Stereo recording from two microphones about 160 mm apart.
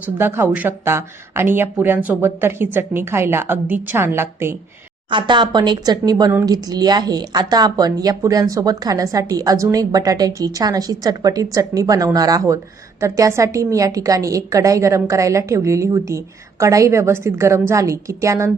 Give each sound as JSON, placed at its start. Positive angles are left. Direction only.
{"t": 0.2, "sound": "a woman's voice", "side_deg": -15}
{"t": 5.1, "sound": "a woman's voice", "side_deg": -30}